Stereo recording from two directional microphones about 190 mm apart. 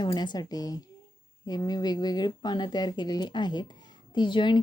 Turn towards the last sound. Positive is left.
turn(degrees=25)  # may be behind; listen again after turning